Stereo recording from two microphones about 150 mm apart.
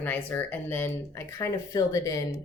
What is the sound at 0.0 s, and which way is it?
Speech, 10° left (ahead or behind).